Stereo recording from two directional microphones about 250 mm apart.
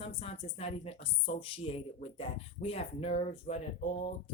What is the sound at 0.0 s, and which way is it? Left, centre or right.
Speech, left.